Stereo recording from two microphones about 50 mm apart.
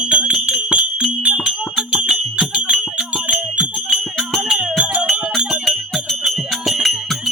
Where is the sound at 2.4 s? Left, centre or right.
Right.